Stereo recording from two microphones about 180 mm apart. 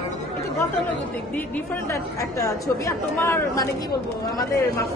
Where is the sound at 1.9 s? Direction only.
15° left (ahead or behind).